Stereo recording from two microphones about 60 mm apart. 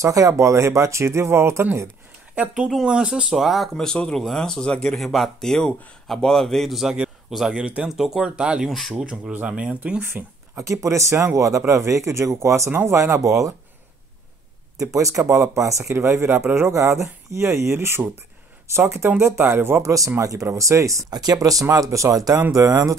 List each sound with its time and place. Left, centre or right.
0.0 s speech: right
2.3 s speech: right
2.7 s speech: centre
3.3 s speech: centre
5.0 s speech: centre
8.6 s speech: centre
9.0 s speech: centre
10.6 s speech: right
14.8 s speech: right
16.0 s speech: right
16.7 s speech: right
19.8 s speech: right
21.6 s speech: right
22.5 s speech: right